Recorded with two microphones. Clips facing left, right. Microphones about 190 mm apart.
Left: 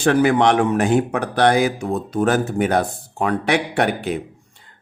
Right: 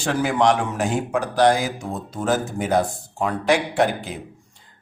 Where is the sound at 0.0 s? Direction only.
60° left (ahead or behind).